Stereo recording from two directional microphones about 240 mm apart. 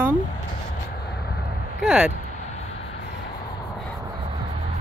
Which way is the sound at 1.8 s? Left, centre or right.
Centre.